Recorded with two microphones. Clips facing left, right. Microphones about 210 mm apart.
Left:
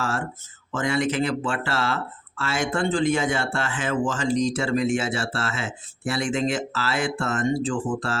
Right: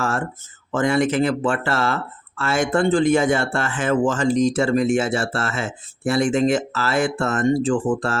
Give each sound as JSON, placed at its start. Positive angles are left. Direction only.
{"t": 0.7, "sound": "speech", "side_deg": -50}